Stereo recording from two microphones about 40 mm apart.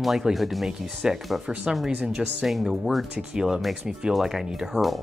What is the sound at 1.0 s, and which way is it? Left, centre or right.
Speech, centre.